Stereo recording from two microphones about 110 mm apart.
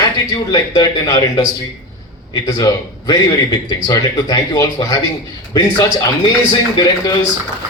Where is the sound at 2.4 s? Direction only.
35° left (ahead or behind).